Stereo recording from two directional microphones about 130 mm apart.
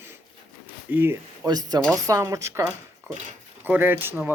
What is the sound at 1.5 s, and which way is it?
A woman's voice, 30° right (ahead or behind).